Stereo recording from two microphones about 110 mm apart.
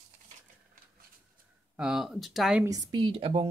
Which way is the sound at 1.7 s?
5° right (ahead or behind).